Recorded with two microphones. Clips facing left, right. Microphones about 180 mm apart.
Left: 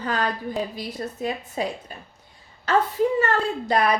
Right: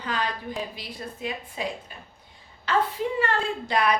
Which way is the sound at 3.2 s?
40° left (ahead or behind).